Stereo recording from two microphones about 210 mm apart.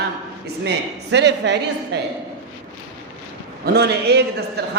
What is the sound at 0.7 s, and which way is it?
A man's voice, 55° right (ahead or behind).